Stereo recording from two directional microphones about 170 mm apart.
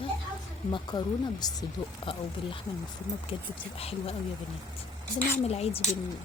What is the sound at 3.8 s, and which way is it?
Speech, 35° left (ahead or behind).